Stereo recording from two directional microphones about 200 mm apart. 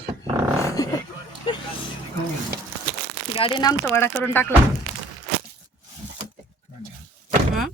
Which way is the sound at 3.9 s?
10° left (ahead or behind).